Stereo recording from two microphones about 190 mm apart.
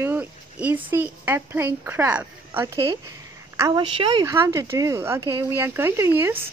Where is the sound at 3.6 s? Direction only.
25° right (ahead or behind).